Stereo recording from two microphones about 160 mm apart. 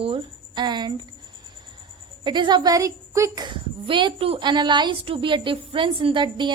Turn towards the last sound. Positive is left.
turn(degrees=-30)  # may be behind; listen again after turning